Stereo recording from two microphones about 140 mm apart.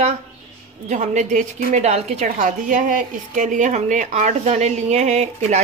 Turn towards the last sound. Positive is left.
turn(degrees=-55)  # may be behind; listen again after turning